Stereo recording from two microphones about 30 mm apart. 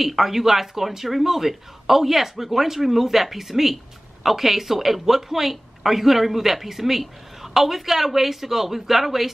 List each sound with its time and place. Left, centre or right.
0.0 s speech: centre